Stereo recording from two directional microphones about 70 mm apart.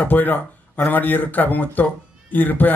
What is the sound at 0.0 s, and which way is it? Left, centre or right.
Speech, left.